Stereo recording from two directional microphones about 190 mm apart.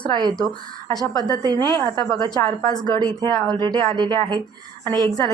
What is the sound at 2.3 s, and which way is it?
Speech, 20° left (ahead or behind).